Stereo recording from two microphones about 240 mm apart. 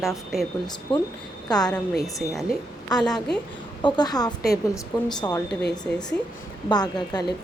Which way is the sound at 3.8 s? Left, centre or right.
Centre.